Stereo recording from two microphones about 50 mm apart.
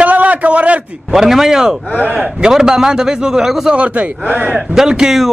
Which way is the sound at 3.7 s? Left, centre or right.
Right.